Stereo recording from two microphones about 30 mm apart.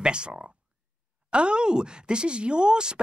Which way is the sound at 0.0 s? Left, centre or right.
Right.